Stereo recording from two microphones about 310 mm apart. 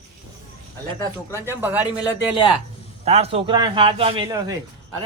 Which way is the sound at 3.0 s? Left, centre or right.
Right.